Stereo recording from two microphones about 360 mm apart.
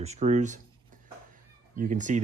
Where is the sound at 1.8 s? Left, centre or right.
Right.